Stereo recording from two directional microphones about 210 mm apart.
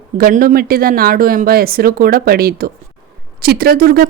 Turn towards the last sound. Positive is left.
turn(degrees=-45)  # may be behind; listen again after turning